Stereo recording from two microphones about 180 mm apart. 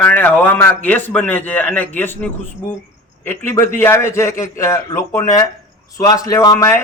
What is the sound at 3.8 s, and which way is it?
A man's voice, 15° left (ahead or behind).